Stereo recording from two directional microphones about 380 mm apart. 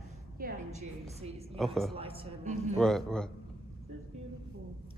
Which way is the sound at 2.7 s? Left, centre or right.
Centre.